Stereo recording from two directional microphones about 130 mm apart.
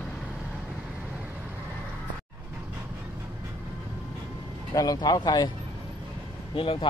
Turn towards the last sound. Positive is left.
turn(degrees=45)  # may be behind; listen again after turning